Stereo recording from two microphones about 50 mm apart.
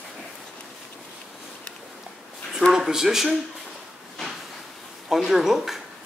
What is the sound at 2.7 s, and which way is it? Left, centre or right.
Speech, centre.